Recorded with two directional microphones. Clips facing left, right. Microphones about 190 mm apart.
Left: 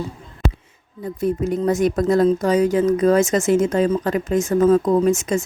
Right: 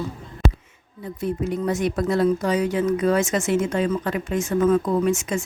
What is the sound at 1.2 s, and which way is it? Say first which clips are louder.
Speech: left 4 dB; 45° left (ahead or behind).